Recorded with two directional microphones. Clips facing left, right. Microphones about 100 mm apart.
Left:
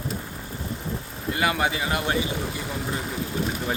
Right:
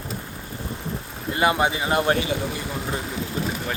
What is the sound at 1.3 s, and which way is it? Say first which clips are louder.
Speech: right 3 dB; 25° right (ahead or behind).